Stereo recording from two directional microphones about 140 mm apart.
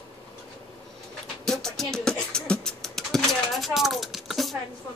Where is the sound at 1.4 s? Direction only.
5° left (ahead or behind).